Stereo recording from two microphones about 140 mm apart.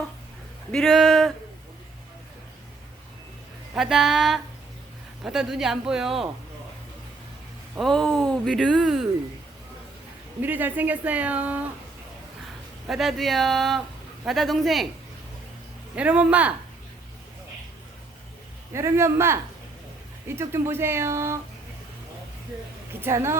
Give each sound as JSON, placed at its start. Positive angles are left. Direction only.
{"t": 0.7, "sound": "speech", "side_deg": 0}
{"t": 3.8, "sound": "speech", "side_deg": 0}
{"t": 7.8, "sound": "speech", "side_deg": 0}
{"t": 10.4, "sound": "a woman's voice", "side_deg": -15}
{"t": 12.9, "sound": "speech", "side_deg": 0}
{"t": 16.0, "sound": "a woman's voice", "side_deg": -10}
{"t": 18.7, "sound": "speech", "side_deg": -20}
{"t": 23.0, "sound": "a woman's voice", "side_deg": -20}